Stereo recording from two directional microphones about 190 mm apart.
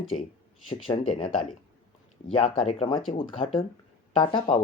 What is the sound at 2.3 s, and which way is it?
Speech, 30° left (ahead or behind).